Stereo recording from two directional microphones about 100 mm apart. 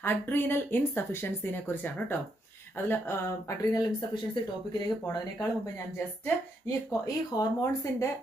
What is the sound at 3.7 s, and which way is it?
Speech, 45° left (ahead or behind).